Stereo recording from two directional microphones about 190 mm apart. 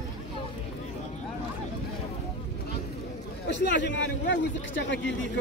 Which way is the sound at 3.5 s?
65° left (ahead or behind).